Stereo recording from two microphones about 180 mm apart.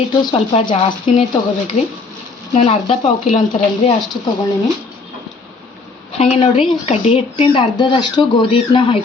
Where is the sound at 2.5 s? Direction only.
35° left (ahead or behind).